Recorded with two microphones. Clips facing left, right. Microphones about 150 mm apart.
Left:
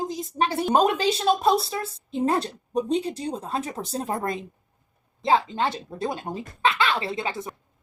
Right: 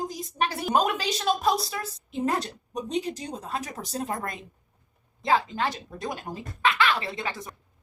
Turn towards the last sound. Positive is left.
turn(degrees=25)  # may be behind; listen again after turning